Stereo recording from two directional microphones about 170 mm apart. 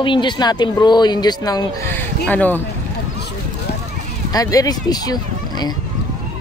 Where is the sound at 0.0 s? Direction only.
30° left (ahead or behind).